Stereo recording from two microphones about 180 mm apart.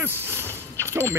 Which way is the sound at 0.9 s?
15° right (ahead or behind).